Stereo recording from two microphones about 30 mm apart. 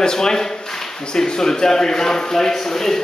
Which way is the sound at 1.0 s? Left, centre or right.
Left.